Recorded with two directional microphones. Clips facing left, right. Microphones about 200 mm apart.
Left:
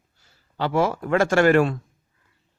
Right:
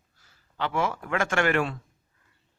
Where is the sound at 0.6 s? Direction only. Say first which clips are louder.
Left 6 dB; 40° left (ahead or behind).